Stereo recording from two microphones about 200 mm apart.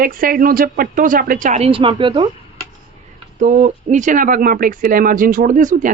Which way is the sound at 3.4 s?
40° right (ahead or behind).